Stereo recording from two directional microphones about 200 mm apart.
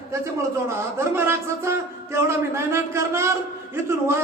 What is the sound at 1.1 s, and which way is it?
Speech, 15° right (ahead or behind).